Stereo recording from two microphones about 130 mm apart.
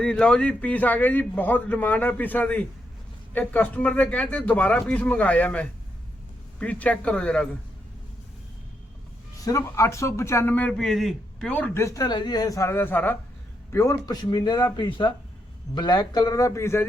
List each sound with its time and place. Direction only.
0.0 s a man's voice: 5° left (ahead or behind)
9.4 s a man's voice: 25° left (ahead or behind)